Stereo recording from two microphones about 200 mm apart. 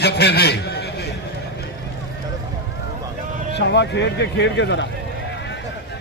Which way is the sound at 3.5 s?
60° left (ahead or behind).